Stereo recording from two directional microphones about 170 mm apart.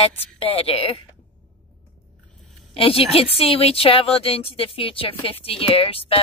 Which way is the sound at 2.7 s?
35° left (ahead or behind).